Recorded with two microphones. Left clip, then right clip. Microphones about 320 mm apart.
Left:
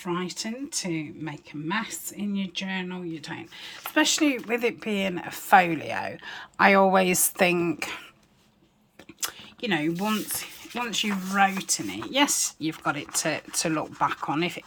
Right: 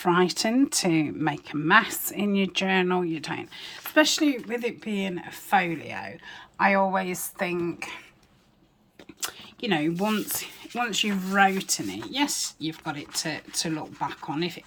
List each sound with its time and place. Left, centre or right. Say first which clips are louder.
0.0 s speech: right 9 dB; centre
9.2 s speech: even; centre